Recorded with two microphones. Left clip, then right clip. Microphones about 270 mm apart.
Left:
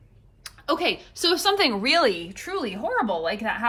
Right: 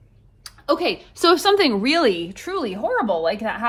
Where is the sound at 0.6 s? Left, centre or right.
Left.